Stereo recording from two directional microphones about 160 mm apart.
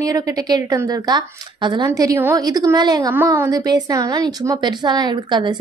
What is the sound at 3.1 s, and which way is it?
A woman's voice, 15° right (ahead or behind).